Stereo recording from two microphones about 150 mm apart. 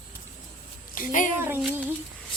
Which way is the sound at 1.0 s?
60° left (ahead or behind).